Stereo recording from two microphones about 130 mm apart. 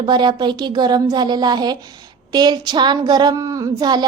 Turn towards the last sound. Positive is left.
turn(degrees=-30)  # may be behind; listen again after turning